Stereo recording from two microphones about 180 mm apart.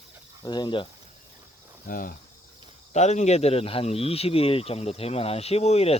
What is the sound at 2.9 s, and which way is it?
Speech, 40° left (ahead or behind).